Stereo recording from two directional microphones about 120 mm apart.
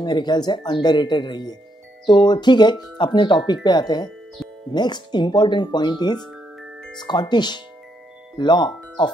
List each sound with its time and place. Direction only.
0.0 s speech: 40° left (ahead or behind)